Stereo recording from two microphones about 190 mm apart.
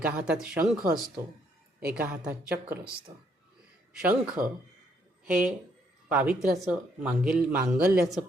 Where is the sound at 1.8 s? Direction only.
5° right (ahead or behind).